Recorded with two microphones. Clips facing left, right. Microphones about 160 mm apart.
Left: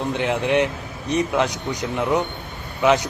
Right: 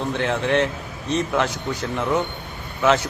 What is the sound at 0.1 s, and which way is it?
A man's voice, 15° left (ahead or behind).